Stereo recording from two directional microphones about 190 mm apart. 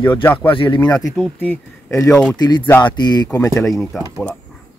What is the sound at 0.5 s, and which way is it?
Speech, 25° left (ahead or behind).